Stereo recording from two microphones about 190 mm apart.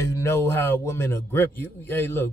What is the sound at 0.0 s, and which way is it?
A man's voice, 15° left (ahead or behind).